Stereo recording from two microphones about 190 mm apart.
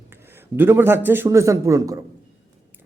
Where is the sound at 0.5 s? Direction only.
10° right (ahead or behind).